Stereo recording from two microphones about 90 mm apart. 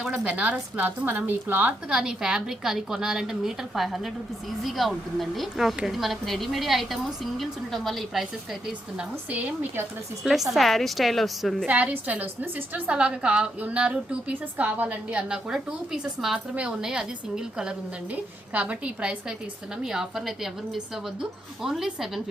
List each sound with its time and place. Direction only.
0.0 s a woman's voice: 10° right (ahead or behind)
1.9 s a woman's voice: 10° right (ahead or behind)
9.3 s a woman's voice: 15° right (ahead or behind)
10.2 s a woman's voice: centre (ahead or behind)
11.6 s a woman's voice: 15° right (ahead or behind)